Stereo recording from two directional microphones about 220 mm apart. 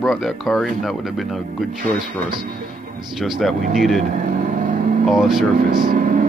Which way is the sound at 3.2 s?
Centre (ahead or behind).